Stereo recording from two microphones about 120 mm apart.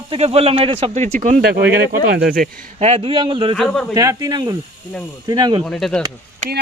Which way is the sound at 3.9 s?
30° right (ahead or behind).